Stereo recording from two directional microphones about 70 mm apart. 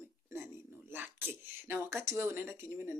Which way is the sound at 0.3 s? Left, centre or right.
Right.